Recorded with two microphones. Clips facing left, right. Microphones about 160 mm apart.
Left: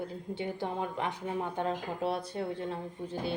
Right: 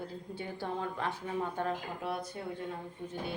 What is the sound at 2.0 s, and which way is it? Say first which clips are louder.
Speech: left 4 dB; 30° left (ahead or behind).